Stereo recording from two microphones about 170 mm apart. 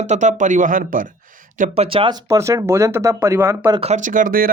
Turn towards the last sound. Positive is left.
turn(degrees=-55)  # may be behind; listen again after turning